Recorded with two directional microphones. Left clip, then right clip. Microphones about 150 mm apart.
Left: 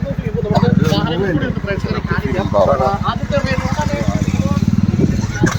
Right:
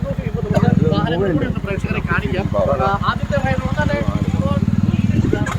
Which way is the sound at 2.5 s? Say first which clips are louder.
Left 5 dB; 25° left (ahead or behind).